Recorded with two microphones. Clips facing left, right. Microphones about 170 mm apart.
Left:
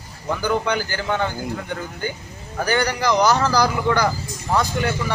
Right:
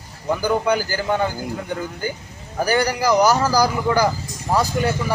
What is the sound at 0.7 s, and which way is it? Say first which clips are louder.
Speech: right 2 dB; 40° right (ahead or behind).